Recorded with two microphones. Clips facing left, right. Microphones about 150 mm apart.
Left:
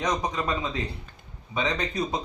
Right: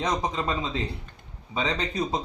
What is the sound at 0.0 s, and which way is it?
Speech, 25° right (ahead or behind).